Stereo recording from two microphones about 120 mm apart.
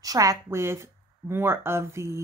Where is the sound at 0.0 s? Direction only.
30° right (ahead or behind).